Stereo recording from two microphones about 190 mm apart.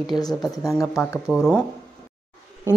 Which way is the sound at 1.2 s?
Centre (ahead or behind).